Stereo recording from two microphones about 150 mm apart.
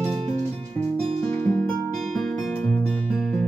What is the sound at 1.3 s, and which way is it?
Music, 10° left (ahead or behind).